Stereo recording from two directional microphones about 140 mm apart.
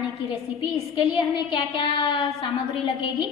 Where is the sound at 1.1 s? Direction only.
35° left (ahead or behind).